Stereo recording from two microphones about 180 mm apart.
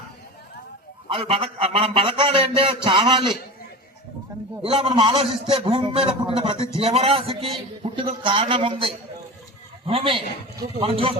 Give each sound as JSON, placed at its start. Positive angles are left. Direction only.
{"t": 1.0, "sound": "a man's voice", "side_deg": -30}
{"t": 4.6, "sound": "a man's voice", "side_deg": -30}